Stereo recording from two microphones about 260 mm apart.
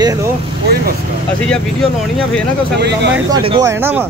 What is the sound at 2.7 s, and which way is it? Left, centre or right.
Speech, right.